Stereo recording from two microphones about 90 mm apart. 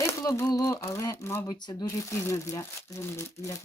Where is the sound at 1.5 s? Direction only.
50° left (ahead or behind).